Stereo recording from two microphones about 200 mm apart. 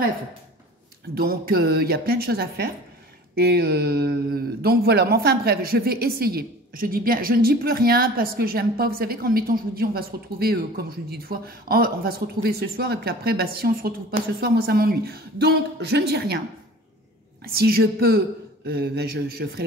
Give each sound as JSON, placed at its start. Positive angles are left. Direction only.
{"t": 1.1, "sound": "speech", "side_deg": -50}
{"t": 17.4, "sound": "speech", "side_deg": -50}